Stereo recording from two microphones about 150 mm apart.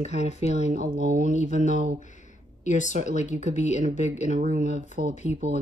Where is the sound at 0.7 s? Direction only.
65° right (ahead or behind).